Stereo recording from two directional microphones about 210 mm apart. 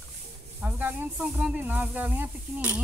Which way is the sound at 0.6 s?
10° right (ahead or behind).